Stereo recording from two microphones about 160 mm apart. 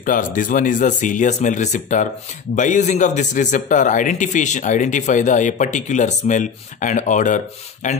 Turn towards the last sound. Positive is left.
turn(degrees=50)  # may be behind; listen again after turning